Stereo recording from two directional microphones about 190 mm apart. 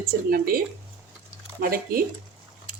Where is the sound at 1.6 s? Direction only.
50° right (ahead or behind).